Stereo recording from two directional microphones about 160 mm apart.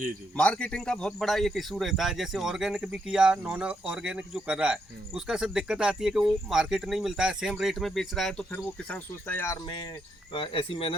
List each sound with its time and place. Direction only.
0.3 s a man's voice: 5° left (ahead or behind)
10.3 s speech: 35° left (ahead or behind)